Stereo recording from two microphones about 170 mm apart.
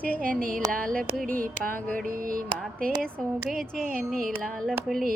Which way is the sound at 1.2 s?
55° right (ahead or behind).